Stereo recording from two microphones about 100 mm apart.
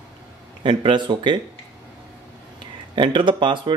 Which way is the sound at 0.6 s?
55° right (ahead or behind).